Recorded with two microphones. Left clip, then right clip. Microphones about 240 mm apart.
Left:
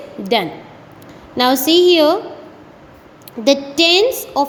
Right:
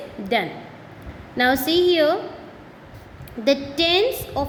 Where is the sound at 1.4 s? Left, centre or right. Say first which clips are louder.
Left 6 dB; centre.